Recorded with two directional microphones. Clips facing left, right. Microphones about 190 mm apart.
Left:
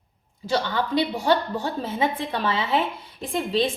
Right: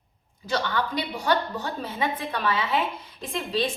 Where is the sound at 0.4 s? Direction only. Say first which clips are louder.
Left 2 dB; 25° left (ahead or behind).